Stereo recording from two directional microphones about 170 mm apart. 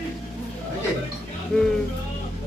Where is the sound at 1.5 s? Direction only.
5° left (ahead or behind).